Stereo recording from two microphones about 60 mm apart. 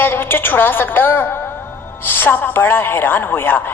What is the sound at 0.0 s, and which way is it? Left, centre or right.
Speech, left.